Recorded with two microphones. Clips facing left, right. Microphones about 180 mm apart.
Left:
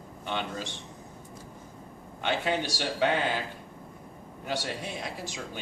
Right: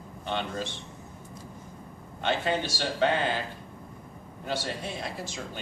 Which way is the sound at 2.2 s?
15° left (ahead or behind).